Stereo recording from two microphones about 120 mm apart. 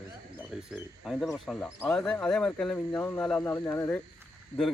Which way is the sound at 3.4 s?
25° left (ahead or behind).